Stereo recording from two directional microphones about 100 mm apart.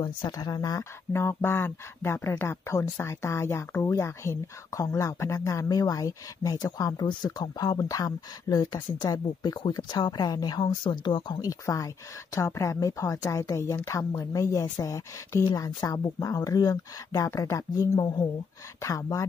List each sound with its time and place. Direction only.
0.3 s speech: 40° left (ahead or behind)
1.1 s speech: 25° left (ahead or behind); by 11.3 s 55° left (ahead or behind)
11.4 s speech: 35° left (ahead or behind)